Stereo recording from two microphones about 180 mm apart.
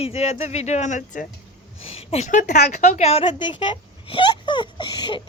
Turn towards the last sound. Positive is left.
turn(degrees=25)  # may be behind; listen again after turning